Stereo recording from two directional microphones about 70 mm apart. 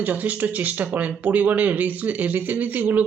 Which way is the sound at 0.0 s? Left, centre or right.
Right.